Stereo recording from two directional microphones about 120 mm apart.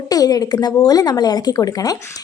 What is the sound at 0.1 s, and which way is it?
A woman's voice, 30° left (ahead or behind).